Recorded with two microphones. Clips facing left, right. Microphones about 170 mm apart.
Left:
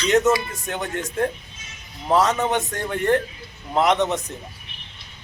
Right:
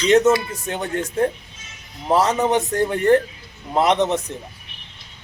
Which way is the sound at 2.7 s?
35° right (ahead or behind).